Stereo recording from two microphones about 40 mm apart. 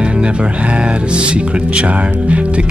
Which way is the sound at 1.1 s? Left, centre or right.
Right.